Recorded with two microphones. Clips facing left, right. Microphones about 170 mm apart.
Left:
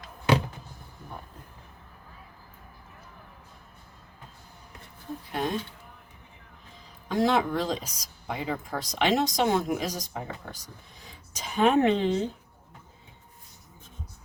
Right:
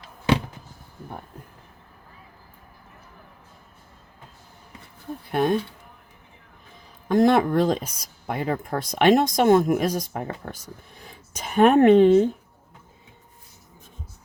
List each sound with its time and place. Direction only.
5.3 s speech: 60° right (ahead or behind)
7.1 s speech: 55° right (ahead or behind)